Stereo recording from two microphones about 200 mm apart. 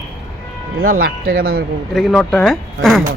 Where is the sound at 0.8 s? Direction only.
45° right (ahead or behind).